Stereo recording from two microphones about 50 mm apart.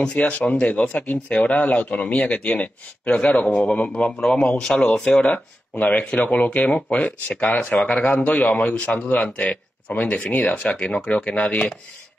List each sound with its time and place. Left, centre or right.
0.1 s speech: left
4.6 s speech: centre
5.2 s speech: left
10.6 s speech: left